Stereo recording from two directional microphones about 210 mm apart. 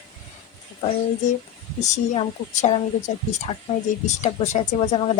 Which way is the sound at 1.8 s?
30° left (ahead or behind).